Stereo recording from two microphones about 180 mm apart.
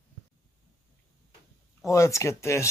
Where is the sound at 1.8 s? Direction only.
15° left (ahead or behind).